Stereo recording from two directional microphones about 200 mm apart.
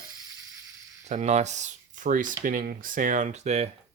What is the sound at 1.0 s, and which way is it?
Speech, 35° right (ahead or behind).